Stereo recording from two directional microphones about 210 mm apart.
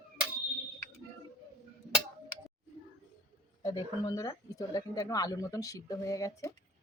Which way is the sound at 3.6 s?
20° left (ahead or behind).